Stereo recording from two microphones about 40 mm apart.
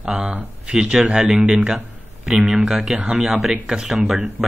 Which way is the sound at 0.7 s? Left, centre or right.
Right.